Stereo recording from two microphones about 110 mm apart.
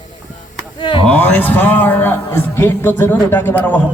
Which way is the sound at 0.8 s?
50° left (ahead or behind).